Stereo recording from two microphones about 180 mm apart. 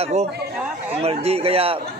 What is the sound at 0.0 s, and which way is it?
A man's voice, 35° right (ahead or behind).